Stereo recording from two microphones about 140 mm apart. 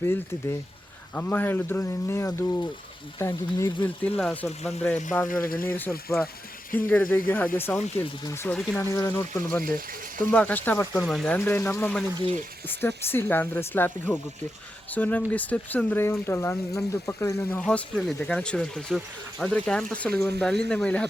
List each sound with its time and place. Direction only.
0.0 s speech: 20° left (ahead or behind)
4.2 s speech: 5° left (ahead or behind)
5.3 s speech: 90° left
5.6 s speech: 15° left (ahead or behind)
8.5 s speech: 5° left (ahead or behind)
8.8 s speech: 20° left (ahead or behind); by 11.3 s 5° left (ahead or behind)
11.3 s speech: 15° left (ahead or behind)
17.6 s speech: 5° left (ahead or behind)